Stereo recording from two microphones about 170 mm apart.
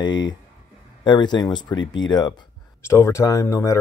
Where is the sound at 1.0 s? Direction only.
25° left (ahead or behind).